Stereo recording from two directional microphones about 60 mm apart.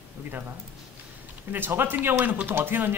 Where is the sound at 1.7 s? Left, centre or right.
Right.